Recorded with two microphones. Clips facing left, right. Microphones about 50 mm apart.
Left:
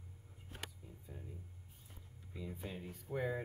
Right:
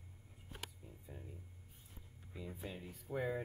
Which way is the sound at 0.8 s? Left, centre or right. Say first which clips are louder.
Even; centre.